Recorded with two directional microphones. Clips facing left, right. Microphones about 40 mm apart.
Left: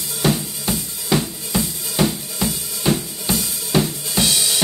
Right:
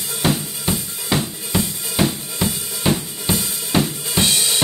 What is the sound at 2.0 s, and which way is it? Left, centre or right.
Drum kit, centre.